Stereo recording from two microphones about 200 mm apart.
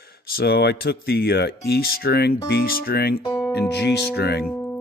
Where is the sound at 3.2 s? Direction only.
15° left (ahead or behind).